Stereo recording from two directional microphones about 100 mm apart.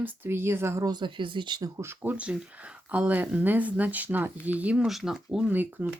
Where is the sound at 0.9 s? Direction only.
50° right (ahead or behind).